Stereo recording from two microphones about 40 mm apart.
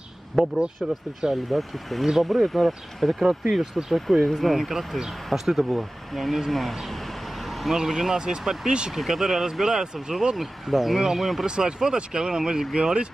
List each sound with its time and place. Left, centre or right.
0.8 s speech: centre
1.3 s speech: centre
7.7 s speech: centre
8.9 s speech: centre
11.4 s speech: centre